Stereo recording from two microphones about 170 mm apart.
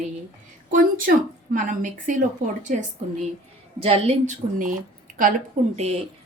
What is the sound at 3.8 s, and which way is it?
Speech, 35° right (ahead or behind).